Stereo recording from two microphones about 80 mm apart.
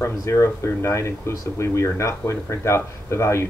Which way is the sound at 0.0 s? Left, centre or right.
Left.